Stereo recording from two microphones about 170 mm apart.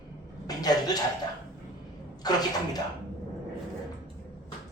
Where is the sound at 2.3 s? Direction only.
25° left (ahead or behind).